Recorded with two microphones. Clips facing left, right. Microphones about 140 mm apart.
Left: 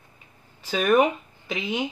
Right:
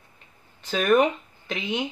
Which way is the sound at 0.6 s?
5° left (ahead or behind).